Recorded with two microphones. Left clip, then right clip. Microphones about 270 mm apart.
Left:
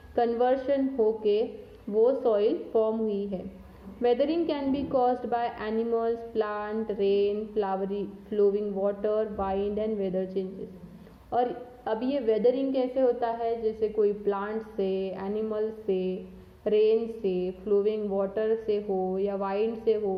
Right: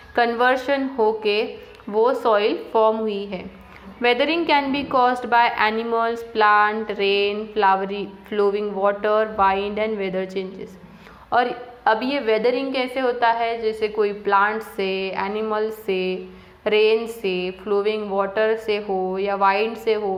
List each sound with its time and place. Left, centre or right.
0.2 s a woman's voice: centre